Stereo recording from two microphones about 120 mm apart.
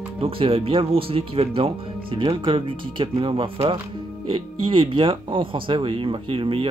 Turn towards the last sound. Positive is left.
turn(degrees=-50)  # may be behind; listen again after turning